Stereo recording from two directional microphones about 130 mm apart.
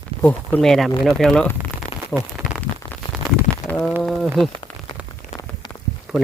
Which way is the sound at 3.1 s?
5° right (ahead or behind).